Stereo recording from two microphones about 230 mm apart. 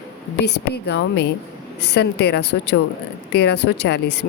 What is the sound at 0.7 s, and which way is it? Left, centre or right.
A woman's voice, left.